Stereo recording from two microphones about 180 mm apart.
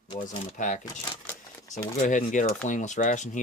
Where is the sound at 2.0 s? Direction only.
45° left (ahead or behind).